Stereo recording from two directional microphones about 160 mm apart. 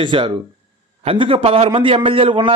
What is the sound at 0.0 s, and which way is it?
A man's voice, 30° right (ahead or behind).